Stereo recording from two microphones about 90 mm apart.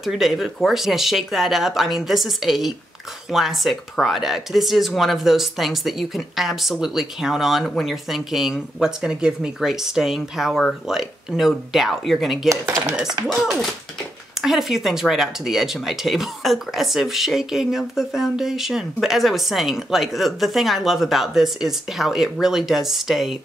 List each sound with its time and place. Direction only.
0.0 s speech: centre (ahead or behind)
12.4 s speech: 35° right (ahead or behind)
13.3 s speech: centre (ahead or behind)